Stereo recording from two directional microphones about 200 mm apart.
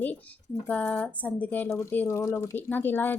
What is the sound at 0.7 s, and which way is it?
A woman's voice, 5° left (ahead or behind).